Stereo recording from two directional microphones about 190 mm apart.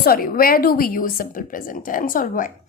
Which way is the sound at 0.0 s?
50° left (ahead or behind).